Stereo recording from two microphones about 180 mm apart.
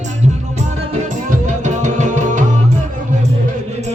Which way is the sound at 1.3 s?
40° right (ahead or behind).